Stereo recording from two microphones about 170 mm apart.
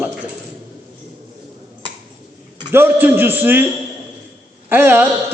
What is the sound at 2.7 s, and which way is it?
Speech, 15° right (ahead or behind).